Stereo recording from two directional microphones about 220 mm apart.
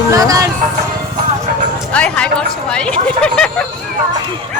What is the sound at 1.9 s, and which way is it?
Speech, 5° left (ahead or behind).